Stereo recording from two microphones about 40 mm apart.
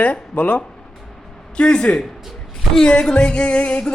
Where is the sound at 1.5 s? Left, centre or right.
Left.